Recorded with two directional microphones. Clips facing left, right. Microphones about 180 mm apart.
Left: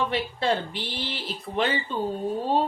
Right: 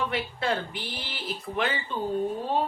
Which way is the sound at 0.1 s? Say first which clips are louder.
Left 3 dB; 30° left (ahead or behind).